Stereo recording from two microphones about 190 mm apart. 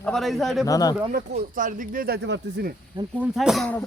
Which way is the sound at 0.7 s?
20° left (ahead or behind).